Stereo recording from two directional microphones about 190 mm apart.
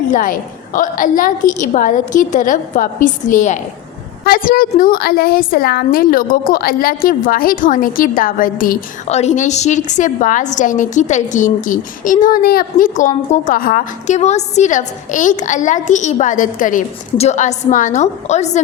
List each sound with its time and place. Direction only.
0.1 s a woman's voice: 45° left (ahead or behind)